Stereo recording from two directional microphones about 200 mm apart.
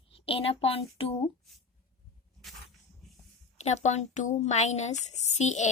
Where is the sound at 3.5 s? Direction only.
35° left (ahead or behind).